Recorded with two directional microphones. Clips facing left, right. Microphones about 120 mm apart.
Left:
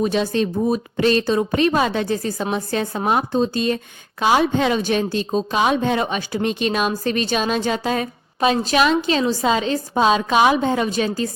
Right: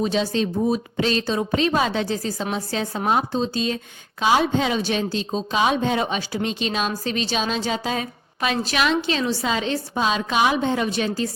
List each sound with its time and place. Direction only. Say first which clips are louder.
0.0 s speech: left 2 dB; 55° left (ahead or behind)
8.4 s a woman's voice: left 5 dB; 35° left (ahead or behind)